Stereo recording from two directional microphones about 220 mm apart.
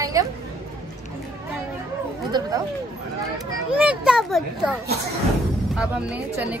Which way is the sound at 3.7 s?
5° right (ahead or behind).